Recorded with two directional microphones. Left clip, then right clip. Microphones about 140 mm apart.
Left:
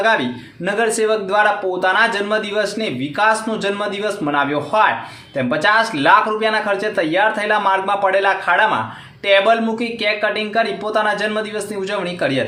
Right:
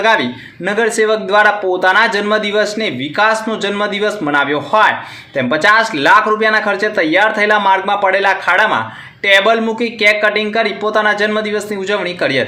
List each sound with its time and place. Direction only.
0.6 s a man's voice: 15° right (ahead or behind)